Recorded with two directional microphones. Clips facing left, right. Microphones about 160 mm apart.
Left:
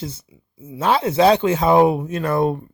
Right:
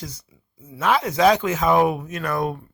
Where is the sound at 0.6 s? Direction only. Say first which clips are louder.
Left 2 dB; 30° left (ahead or behind).